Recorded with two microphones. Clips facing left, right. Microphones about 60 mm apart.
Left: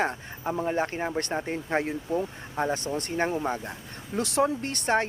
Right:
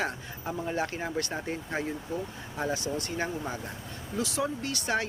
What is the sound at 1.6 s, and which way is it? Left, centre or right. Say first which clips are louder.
Speech: left 5 dB; left.